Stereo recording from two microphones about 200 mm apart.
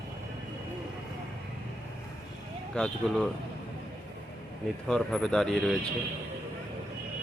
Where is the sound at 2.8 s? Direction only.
5° left (ahead or behind).